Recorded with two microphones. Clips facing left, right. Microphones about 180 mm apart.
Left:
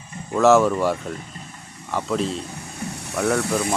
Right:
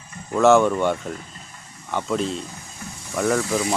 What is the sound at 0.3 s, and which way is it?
Speech, centre (ahead or behind).